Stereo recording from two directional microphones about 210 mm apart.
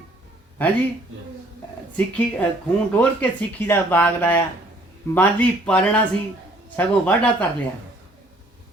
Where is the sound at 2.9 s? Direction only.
5° left (ahead or behind).